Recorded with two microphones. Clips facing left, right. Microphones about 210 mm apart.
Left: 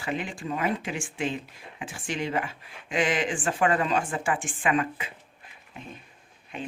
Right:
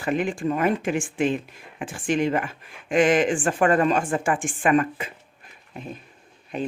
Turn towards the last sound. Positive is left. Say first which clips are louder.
# right 8 dB
turn(degrees=-40)  # may be behind; listen again after turning